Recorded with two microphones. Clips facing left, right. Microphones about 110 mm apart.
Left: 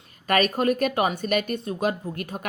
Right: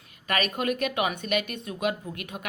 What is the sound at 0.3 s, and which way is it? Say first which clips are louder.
Speech: left 6 dB; 40° left (ahead or behind).